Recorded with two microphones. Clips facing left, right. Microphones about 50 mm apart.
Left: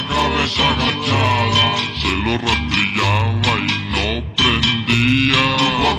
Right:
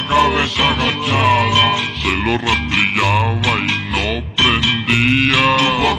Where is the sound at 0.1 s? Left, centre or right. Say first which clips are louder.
Right 4 dB; centre.